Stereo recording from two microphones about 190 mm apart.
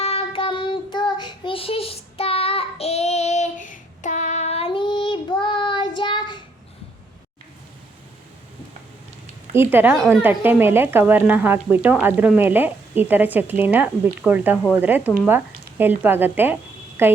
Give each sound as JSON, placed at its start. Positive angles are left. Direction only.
{"t": 0.0, "sound": "child singing", "side_deg": 30}
{"t": 9.6, "sound": "speech", "side_deg": -10}